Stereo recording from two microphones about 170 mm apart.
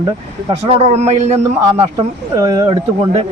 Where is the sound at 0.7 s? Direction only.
35° right (ahead or behind).